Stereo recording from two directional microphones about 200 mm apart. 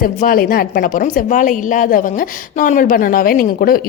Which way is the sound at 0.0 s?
45° left (ahead or behind).